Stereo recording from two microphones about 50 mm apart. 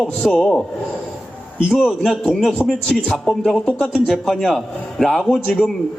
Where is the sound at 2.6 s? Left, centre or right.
Left.